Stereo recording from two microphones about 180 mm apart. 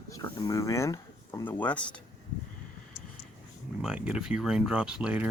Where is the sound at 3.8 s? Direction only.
5° right (ahead or behind).